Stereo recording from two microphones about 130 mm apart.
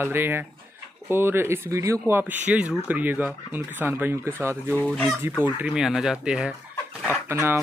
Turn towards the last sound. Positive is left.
turn(degrees=-20)  # may be behind; listen again after turning